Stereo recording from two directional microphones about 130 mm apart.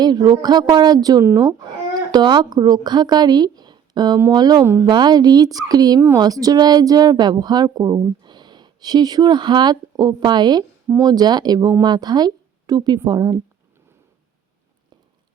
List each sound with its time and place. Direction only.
0.0 s a woman's voice: 30° right (ahead or behind)